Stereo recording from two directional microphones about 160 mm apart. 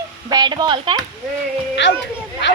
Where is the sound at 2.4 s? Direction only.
90° left.